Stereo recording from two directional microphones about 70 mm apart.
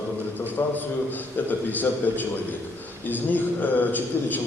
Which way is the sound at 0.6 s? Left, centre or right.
Left.